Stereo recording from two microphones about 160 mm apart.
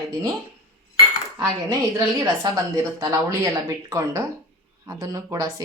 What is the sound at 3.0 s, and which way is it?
Speech, 20° right (ahead or behind).